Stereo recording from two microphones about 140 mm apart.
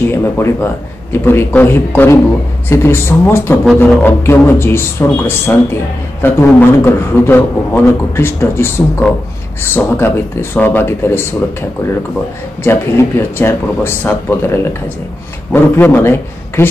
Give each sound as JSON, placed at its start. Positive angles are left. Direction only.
{"t": 0.1, "sound": "a man's voice", "side_deg": 15}
{"t": 12.6, "sound": "a man's voice", "side_deg": 20}